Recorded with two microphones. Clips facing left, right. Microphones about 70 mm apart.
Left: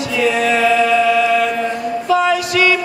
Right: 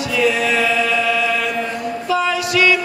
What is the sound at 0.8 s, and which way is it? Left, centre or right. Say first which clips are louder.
Music: left 5 dB; centre.